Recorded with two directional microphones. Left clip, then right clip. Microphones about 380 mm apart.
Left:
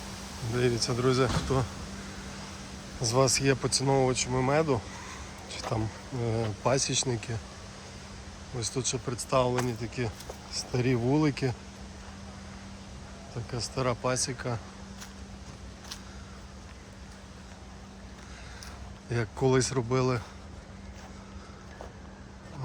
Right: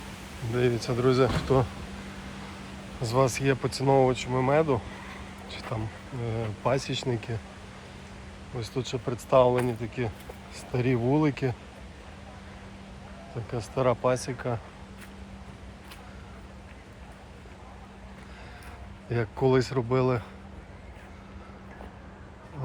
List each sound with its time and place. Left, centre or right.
0.5 s speech: centre
3.0 s speech: centre
6.2 s speech: centre
8.5 s speech: centre
13.5 s speech: centre
19.1 s speech: centre